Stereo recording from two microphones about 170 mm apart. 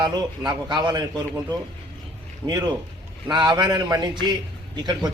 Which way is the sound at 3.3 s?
25° right (ahead or behind).